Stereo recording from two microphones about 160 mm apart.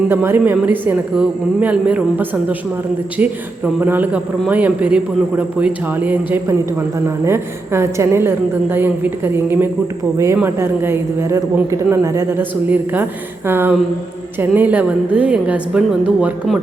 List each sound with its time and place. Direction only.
0.1 s a man's voice: 15° right (ahead or behind)